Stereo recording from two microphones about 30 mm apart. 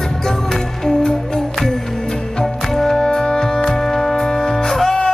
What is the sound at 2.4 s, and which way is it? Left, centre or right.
Music, centre.